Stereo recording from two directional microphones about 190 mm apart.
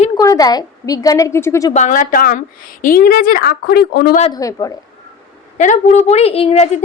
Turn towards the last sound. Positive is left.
turn(degrees=35)  # may be behind; listen again after turning